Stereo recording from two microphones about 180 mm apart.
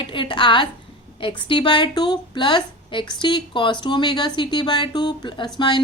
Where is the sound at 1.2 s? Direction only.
30° left (ahead or behind).